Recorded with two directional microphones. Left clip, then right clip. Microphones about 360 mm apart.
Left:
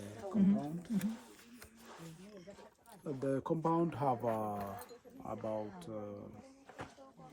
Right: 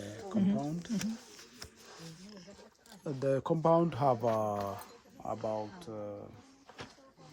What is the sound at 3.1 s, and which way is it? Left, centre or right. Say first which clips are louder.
Speech: right 5 dB; right.